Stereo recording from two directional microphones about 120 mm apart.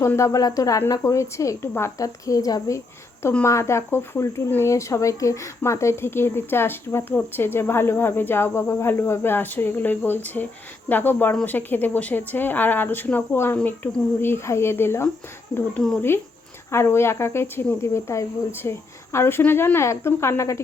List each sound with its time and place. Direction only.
0.0 s speech: 25° left (ahead or behind)